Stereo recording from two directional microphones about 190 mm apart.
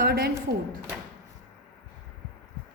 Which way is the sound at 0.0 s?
55° right (ahead or behind).